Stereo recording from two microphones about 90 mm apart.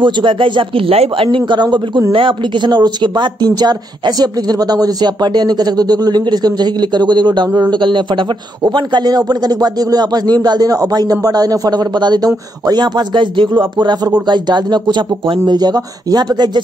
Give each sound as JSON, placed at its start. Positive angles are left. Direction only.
{"t": 0.0, "sound": "speech", "side_deg": -65}
{"t": 1.4, "sound": "speech", "side_deg": -55}